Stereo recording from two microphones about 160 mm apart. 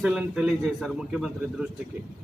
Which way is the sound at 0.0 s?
5° right (ahead or behind).